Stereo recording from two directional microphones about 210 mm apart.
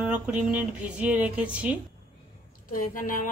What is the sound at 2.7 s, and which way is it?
Speech, 40° left (ahead or behind).